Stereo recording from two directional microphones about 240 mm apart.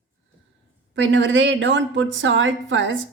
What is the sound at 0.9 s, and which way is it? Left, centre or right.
A woman's voice, right.